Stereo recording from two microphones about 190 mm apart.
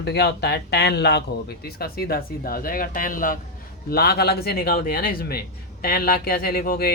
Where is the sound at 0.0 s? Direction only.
60° left (ahead or behind).